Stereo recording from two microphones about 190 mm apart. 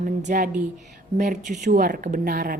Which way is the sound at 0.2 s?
45° right (ahead or behind).